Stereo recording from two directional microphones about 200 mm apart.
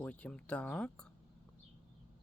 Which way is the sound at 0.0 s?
5° left (ahead or behind).